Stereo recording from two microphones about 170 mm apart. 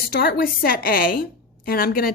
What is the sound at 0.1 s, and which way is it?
A woman's voice, 60° left (ahead or behind).